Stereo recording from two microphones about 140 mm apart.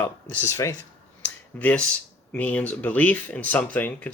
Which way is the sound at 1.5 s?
10° left (ahead or behind).